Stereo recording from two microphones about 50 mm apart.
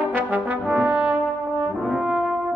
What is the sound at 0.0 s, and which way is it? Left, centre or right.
Brass instrument, right.